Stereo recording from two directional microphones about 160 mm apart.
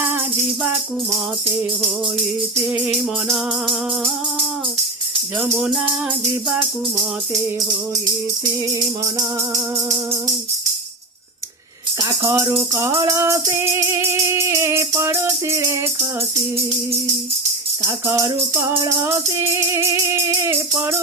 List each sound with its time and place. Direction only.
2.6 s music: 10° right (ahead or behind)
5.4 s music: 5° right (ahead or behind)
11.9 s music: 20° right (ahead or behind)
17.8 s music: 15° right (ahead or behind)